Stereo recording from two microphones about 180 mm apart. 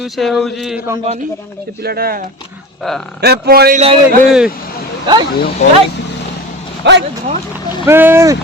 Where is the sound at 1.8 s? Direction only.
60° right (ahead or behind).